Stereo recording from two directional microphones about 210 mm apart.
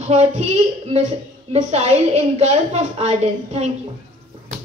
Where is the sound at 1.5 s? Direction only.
30° right (ahead or behind).